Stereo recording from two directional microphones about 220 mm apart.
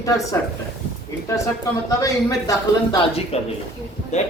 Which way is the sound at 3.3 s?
30° left (ahead or behind).